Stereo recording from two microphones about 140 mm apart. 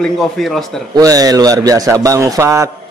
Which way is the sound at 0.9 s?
25° right (ahead or behind).